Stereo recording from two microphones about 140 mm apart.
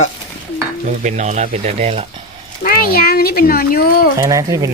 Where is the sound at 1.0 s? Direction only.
55° right (ahead or behind).